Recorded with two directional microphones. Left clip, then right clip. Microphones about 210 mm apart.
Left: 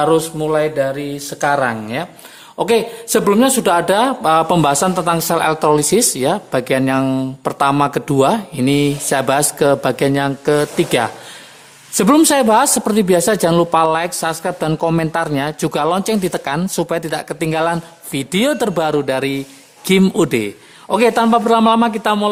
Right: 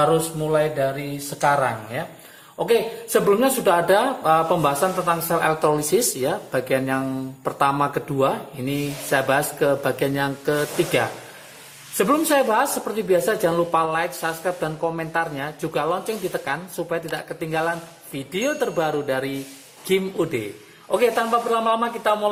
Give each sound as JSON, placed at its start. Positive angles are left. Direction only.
{"t": 0.0, "sound": "speech", "side_deg": 50}